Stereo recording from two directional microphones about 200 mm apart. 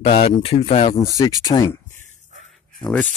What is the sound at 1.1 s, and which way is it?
Speech, 20° left (ahead or behind).